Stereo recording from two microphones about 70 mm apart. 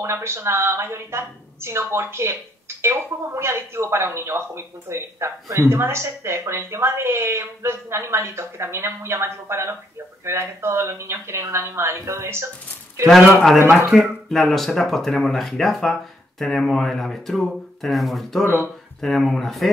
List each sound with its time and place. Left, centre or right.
0.0 s a woman's voice: right
13.8 s speech: centre
18.4 s a woman's voice: right
18.9 s speech: centre